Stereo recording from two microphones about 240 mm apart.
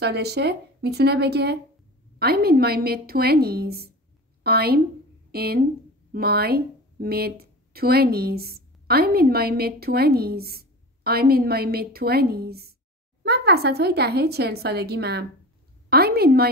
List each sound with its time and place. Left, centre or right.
0.0 s a woman's voice: right